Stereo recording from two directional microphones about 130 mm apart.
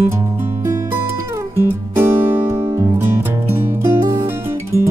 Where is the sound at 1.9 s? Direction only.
20° right (ahead or behind).